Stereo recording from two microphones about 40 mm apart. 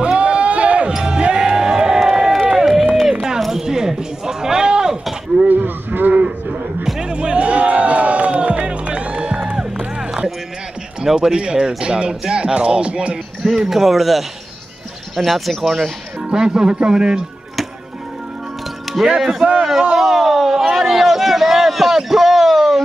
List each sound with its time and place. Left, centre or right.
0.0 s sheep: right
1.0 s music: right
2.5 s run: centre
3.3 s a sound: centre
5.5 s a sound: right
6.2 s a sound: centre
7.0 s music: right
11.1 s speech: right
13.4 s a man's voice: centre
16.2 s speech: centre
19.0 s speech: right
19.6 s a sound: centre